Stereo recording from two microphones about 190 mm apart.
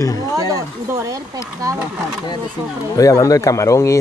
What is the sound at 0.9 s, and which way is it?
Speech, 20° right (ahead or behind).